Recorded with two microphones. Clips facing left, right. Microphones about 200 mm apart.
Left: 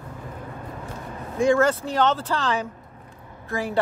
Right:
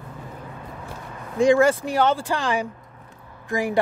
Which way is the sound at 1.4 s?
15° right (ahead or behind).